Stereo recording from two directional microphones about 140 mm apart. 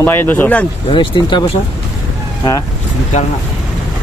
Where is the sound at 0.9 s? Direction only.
35° left (ahead or behind).